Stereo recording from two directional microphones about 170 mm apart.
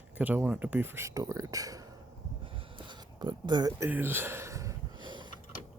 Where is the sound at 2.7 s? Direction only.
25° right (ahead or behind).